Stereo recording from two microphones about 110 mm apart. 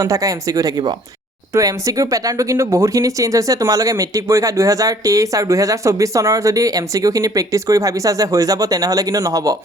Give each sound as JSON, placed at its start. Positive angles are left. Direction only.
{"t": 0.0, "sound": "speech", "side_deg": -30}